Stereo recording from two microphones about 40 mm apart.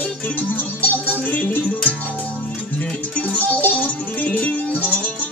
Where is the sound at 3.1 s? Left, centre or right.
Left.